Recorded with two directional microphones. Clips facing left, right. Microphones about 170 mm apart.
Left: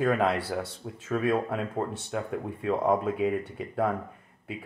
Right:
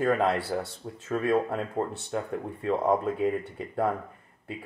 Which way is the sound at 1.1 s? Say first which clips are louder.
Right 1 dB; 5° left (ahead or behind).